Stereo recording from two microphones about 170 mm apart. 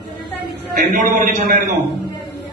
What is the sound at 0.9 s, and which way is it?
Speech, 50° right (ahead or behind).